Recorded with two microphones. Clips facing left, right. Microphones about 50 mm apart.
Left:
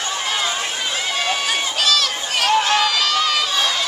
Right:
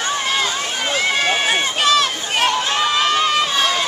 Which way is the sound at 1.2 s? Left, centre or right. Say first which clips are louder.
Right 4 dB; right.